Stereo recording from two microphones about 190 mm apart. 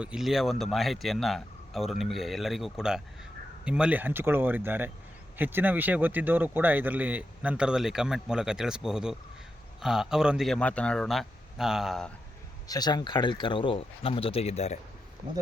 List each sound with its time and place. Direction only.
0.0 s a man's voice: 5° right (ahead or behind)
12.6 s speech: 20° left (ahead or behind)